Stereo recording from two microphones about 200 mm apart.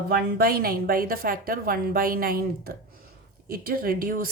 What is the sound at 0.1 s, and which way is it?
Speech, 50° right (ahead or behind).